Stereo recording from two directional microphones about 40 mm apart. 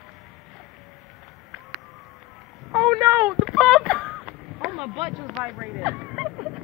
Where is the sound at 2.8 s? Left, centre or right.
Centre.